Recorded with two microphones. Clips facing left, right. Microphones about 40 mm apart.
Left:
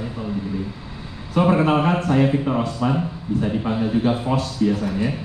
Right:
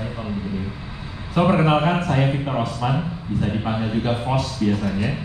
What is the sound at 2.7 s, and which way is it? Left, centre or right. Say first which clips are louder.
A man's voice: left 2 dB; right.